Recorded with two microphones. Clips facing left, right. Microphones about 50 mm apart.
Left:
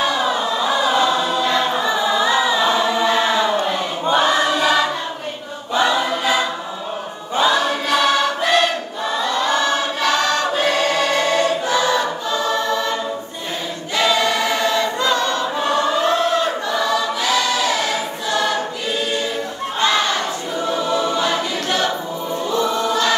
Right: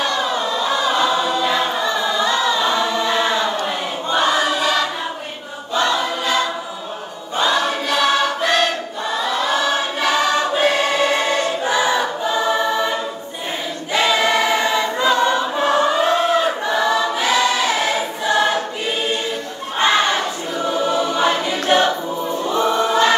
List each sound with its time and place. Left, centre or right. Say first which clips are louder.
0.0 s choir: left 1 dB; centre
5.8 s choir: left 1 dB; centre
13.9 s choir: right 1 dB; centre
19.8 s a sound: right 2 dB; right
20.8 s choir: right 3 dB; centre
22.6 s choir: right 4 dB; right